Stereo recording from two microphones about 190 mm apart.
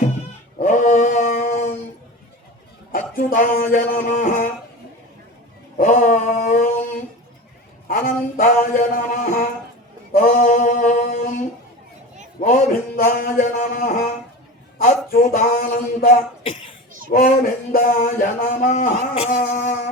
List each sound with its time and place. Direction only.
0.6 s chant: 40° left (ahead or behind)
2.9 s speech: 45° left (ahead or behind)
5.7 s a sound: 40° left (ahead or behind)
12.4 s mantra: 40° left (ahead or behind)
14.8 s a man's voice: 40° left (ahead or behind)
17.1 s a sound: 45° left (ahead or behind)